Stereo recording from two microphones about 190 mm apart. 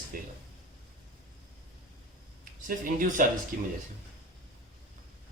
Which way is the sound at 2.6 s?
45° right (ahead or behind).